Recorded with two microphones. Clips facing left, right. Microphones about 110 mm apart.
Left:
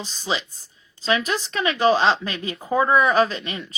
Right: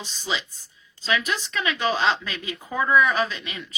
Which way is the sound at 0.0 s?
35° left (ahead or behind).